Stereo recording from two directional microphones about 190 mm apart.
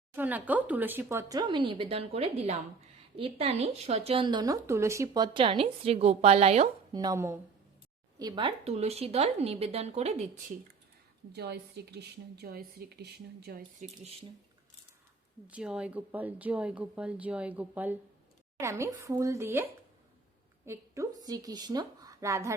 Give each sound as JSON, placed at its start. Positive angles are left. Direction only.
{"t": 0.2, "sound": "speech", "side_deg": -10}
{"t": 6.9, "sound": "speech", "side_deg": -20}
{"t": 8.2, "sound": "speech", "side_deg": -25}
{"t": 11.3, "sound": "a woman's voice", "side_deg": -60}
{"t": 15.4, "sound": "speech", "side_deg": -5}
{"t": 20.7, "sound": "a woman's voice", "side_deg": -15}